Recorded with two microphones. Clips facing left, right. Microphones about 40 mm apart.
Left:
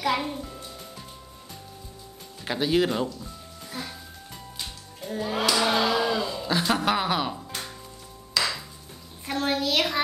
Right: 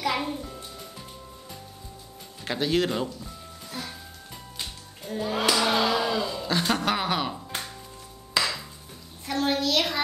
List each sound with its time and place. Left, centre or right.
0.0 s music: centre
2.4 s speech: centre
5.0 s speech: centre
8.4 s a sound: right
9.2 s a child's voice: centre